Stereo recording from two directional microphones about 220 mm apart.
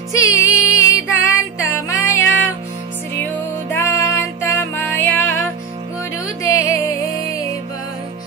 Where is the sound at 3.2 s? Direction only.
10° left (ahead or behind).